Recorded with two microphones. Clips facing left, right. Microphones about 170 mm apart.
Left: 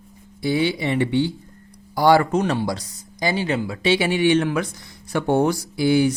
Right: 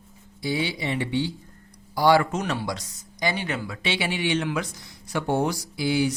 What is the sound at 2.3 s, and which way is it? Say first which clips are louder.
Speech: left 7 dB; 30° left (ahead or behind).